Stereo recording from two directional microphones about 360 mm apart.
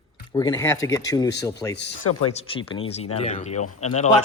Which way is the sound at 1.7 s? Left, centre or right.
Left.